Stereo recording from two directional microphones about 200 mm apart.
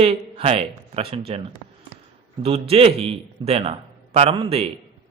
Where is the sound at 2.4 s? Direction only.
30° right (ahead or behind).